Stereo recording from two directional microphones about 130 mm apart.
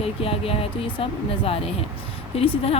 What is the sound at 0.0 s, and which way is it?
Speech, 45° left (ahead or behind).